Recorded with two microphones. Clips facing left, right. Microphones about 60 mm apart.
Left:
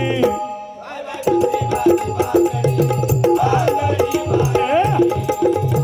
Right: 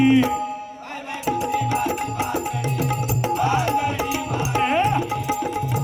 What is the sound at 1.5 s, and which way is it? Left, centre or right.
Music, right.